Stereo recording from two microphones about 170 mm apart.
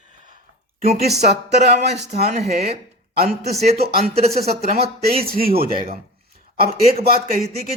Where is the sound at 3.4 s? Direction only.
40° right (ahead or behind).